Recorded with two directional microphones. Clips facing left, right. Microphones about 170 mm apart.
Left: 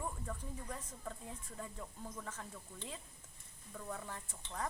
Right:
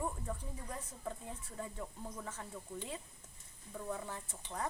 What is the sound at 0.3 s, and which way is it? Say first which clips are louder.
Speech: right 2 dB; 15° right (ahead or behind).